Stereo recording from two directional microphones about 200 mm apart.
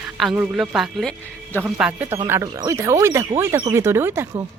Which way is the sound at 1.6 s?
5° right (ahead or behind).